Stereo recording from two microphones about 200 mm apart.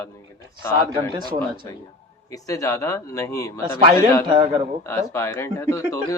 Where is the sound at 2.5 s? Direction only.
15° left (ahead or behind).